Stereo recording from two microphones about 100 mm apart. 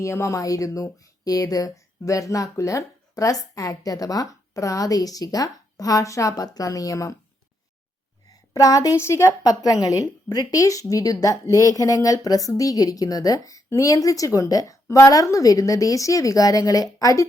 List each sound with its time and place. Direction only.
0.0 s a woman's voice: 30° left (ahead or behind)
8.3 s a woman's voice: 35° left (ahead or behind)